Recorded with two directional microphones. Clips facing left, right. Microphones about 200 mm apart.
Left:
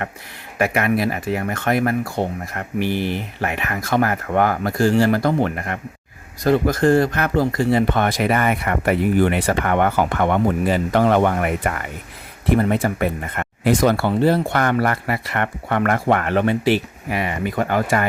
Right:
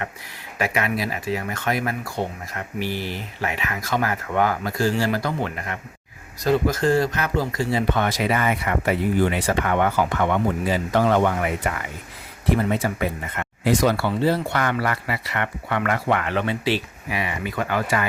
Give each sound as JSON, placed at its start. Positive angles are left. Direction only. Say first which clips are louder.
{"t": 0.6, "sound": "speech", "louder": "left 5 dB", "side_deg": 55}